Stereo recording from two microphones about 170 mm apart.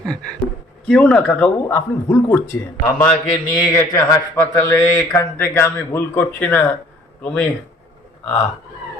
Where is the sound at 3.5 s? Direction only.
20° left (ahead or behind).